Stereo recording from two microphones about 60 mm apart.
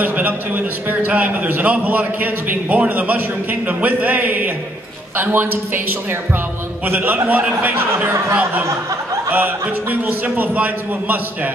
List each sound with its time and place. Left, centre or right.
0.0 s a man's voice: right
6.9 s a man's voice: right